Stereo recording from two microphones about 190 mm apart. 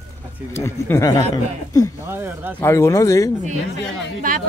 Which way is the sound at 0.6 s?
15° left (ahead or behind).